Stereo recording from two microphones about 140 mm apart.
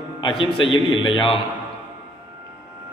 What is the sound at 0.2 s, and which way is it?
A man's voice, 40° left (ahead or behind).